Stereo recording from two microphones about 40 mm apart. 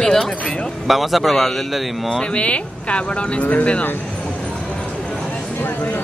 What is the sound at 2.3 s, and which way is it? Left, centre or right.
Speech, left.